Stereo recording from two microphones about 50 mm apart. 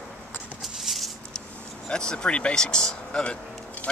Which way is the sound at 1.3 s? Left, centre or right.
Centre.